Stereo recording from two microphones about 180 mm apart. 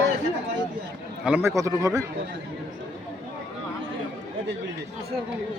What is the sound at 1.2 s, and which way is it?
Speech, 10° right (ahead or behind).